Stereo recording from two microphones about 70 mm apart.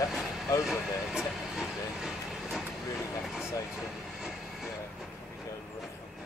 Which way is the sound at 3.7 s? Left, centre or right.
Centre.